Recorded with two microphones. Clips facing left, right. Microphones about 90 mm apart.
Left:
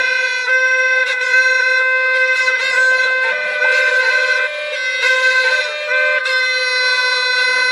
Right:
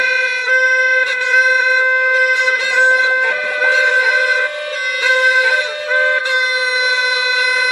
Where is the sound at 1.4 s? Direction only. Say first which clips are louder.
Right 2 dB; 15° right (ahead or behind).